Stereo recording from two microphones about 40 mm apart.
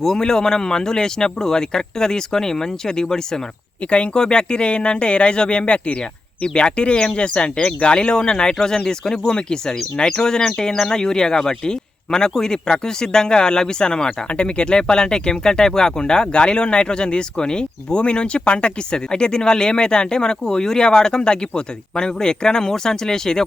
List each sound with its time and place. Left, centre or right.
0.0 s speech: centre